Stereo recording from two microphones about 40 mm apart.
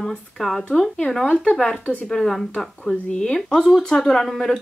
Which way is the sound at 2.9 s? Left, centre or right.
Centre.